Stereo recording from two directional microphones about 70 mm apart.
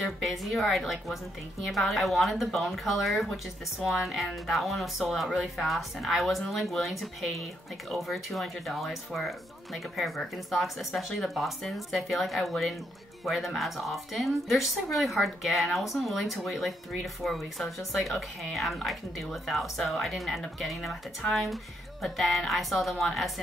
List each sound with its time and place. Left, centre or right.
0.0 s speech: centre